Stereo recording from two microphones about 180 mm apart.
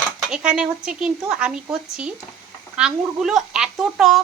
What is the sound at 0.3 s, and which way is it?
Speech, 5° right (ahead or behind).